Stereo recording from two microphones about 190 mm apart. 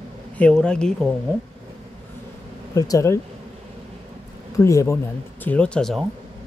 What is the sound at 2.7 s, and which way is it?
Speech, 20° left (ahead or behind).